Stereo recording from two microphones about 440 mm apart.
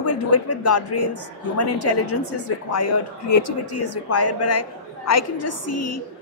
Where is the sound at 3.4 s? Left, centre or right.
Left.